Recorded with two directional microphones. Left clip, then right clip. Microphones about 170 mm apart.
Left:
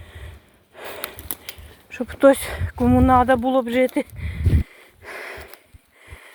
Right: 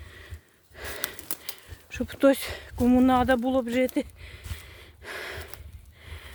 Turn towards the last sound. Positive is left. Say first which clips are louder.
# left 3 dB
turn(degrees=-15)  # may be behind; listen again after turning